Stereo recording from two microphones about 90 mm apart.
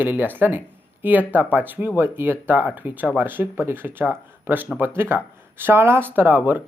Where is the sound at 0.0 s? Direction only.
20° right (ahead or behind).